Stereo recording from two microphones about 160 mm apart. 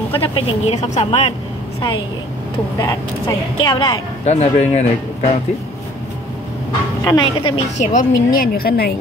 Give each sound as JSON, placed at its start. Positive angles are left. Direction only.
{"t": 0.1, "sound": "speech", "side_deg": 35}
{"t": 0.7, "sound": "speech", "side_deg": 45}
{"t": 2.8, "sound": "speech", "side_deg": 25}
{"t": 4.2, "sound": "speech", "side_deg": 45}
{"t": 7.1, "sound": "speech", "side_deg": 30}
{"t": 7.8, "sound": "a woman's voice", "side_deg": 55}